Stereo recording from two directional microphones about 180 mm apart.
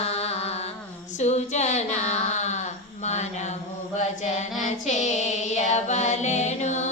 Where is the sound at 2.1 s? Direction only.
40° left (ahead or behind).